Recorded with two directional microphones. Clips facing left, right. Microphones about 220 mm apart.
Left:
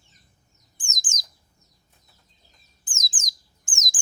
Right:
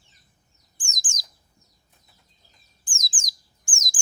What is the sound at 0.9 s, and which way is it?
Bird, 20° left (ahead or behind).